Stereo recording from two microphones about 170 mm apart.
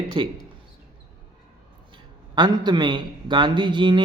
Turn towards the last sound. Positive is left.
turn(degrees=-25)  # may be behind; listen again after turning